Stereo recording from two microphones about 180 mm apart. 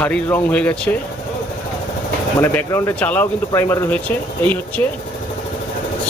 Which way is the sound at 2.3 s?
15° left (ahead or behind).